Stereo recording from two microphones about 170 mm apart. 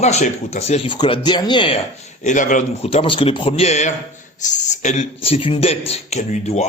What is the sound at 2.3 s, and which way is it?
A man's voice, 45° left (ahead or behind).